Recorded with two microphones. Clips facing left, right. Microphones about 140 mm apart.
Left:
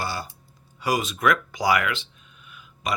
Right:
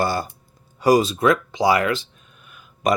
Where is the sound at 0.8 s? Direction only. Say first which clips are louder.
Right 8 dB; 35° right (ahead or behind).